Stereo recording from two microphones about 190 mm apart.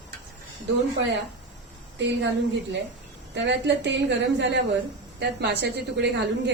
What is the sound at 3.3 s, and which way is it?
A woman's voice, 65° right (ahead or behind).